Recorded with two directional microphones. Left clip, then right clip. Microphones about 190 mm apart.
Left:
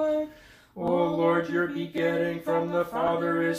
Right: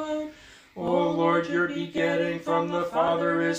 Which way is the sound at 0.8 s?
15° right (ahead or behind).